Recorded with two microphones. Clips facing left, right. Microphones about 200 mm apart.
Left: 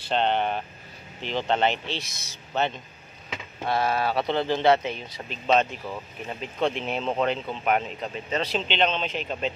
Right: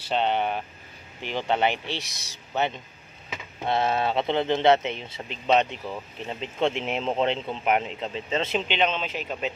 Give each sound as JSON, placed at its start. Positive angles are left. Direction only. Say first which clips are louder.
{"t": 0.0, "sound": "speech", "louder": "left 1 dB", "side_deg": -5}
{"t": 8.5, "sound": "speech", "louder": "left 1 dB", "side_deg": -10}